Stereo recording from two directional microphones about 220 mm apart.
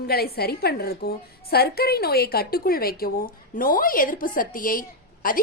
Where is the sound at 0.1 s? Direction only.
45° left (ahead or behind).